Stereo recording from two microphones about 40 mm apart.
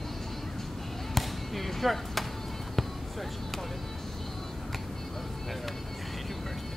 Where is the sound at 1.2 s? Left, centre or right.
Centre.